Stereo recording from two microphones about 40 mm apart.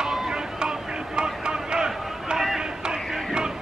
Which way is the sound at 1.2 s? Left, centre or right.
Right.